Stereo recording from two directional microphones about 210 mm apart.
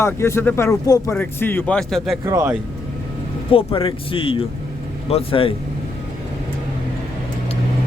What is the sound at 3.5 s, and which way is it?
Speech, 25° left (ahead or behind).